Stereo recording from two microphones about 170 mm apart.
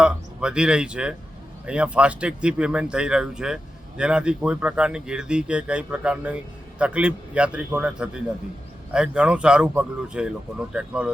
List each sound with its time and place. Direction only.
0.0 s speech: 5° right (ahead or behind)